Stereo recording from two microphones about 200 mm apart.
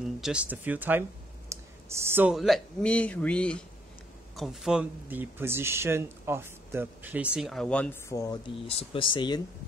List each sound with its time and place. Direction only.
0.2 s speech: 5° right (ahead or behind); by 8.4 s 15° left (ahead or behind)
8.6 s speech: 25° left (ahead or behind)